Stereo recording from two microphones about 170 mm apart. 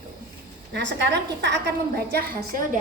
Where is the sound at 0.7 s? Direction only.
90° right; by 2.8 s 60° right (ahead or behind).